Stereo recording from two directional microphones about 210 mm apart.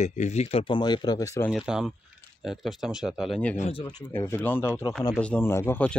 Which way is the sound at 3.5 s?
30° left (ahead or behind).